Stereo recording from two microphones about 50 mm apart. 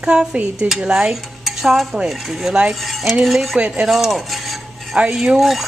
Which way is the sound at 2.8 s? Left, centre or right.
Centre.